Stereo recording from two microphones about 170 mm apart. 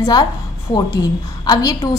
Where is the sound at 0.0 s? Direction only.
25° left (ahead or behind).